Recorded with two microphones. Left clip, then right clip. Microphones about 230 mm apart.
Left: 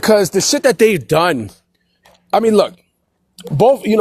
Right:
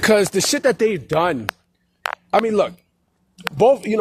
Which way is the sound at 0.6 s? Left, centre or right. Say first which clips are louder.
Left 8 dB; left.